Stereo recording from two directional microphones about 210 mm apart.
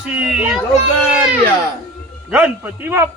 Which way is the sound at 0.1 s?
5° right (ahead or behind).